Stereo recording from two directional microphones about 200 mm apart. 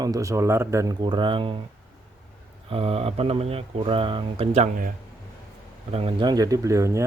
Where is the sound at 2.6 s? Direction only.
30° right (ahead or behind).